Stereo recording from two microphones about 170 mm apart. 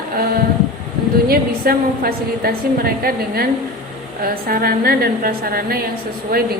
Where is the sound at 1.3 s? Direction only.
60° right (ahead or behind).